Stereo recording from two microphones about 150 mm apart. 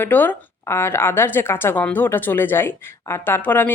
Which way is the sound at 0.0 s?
10° left (ahead or behind).